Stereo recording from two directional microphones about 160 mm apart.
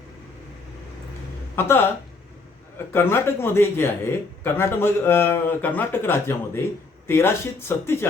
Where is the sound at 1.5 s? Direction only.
15° left (ahead or behind).